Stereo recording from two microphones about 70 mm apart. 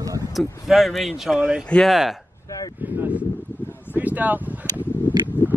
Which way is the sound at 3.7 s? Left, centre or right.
Left.